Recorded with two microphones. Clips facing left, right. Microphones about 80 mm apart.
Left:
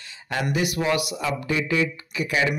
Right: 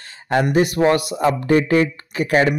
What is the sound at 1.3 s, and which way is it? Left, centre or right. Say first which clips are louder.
Speech: right 9 dB; right.